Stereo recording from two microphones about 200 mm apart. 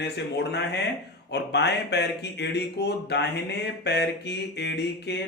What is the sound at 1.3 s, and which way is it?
Speech, 55° left (ahead or behind).